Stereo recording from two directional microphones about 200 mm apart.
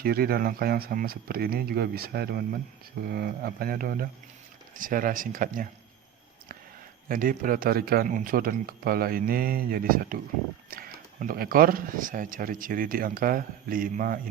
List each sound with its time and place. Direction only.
0.0 s speech: 50° right (ahead or behind)
7.1 s speech: 45° right (ahead or behind)